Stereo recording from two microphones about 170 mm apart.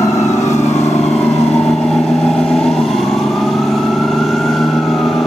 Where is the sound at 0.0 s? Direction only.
20° left (ahead or behind).